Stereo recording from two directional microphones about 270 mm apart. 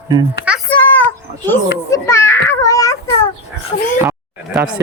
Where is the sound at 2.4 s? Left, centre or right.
Centre.